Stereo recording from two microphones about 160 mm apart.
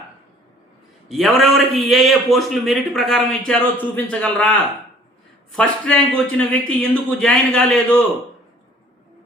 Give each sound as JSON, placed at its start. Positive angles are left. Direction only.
{"t": 1.0, "sound": "a man's voice", "side_deg": 0}